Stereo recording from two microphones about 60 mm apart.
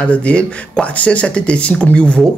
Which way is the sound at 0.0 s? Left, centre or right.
Centre.